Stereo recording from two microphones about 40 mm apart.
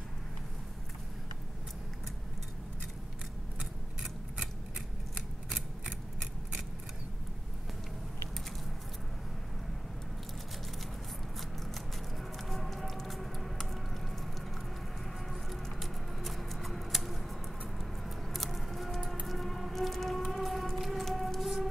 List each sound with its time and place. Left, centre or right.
5.1 s scissors: right
12.2 s music: centre
15.5 s patter: centre
17.7 s a sound: centre
19.2 s siren: centre